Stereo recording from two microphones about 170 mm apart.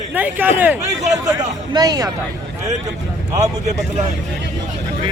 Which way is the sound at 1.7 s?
20° right (ahead or behind).